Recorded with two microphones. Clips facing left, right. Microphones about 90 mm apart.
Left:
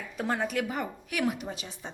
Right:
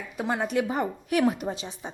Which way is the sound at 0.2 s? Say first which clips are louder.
Right 3 dB; 15° right (ahead or behind).